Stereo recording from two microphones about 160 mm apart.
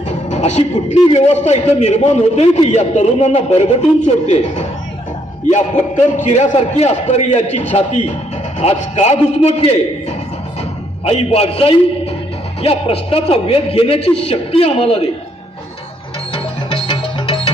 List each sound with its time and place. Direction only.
0.3 s a man's voice: 45° left (ahead or behind)
6.1 s a man's voice: 50° left (ahead or behind)
11.0 s a man's voice: 40° left (ahead or behind)
16.3 s music: 35° left (ahead or behind)